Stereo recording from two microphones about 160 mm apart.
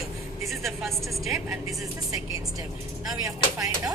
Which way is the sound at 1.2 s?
Centre (ahead or behind).